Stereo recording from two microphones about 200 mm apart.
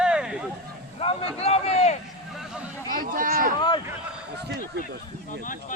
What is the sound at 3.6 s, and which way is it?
Speech, 20° left (ahead or behind).